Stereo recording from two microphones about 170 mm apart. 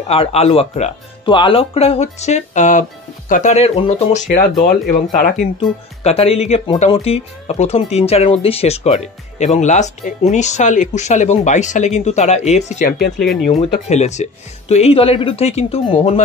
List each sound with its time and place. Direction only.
0.1 s speech: 35° left (ahead or behind); by 5.3 s 50° left (ahead or behind)
6.0 s speech: 35° left (ahead or behind)
13.2 s speech: centre (ahead or behind)
13.5 s speech: 40° left (ahead or behind)